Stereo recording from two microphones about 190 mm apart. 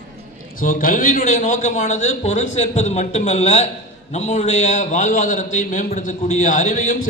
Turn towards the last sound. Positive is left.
turn(degrees=40)  # may be behind; listen again after turning